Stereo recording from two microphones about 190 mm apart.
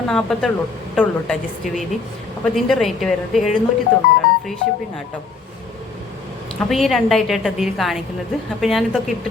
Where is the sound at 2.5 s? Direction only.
Centre (ahead or behind).